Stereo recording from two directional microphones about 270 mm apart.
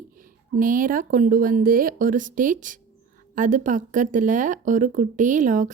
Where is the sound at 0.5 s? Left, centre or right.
Right.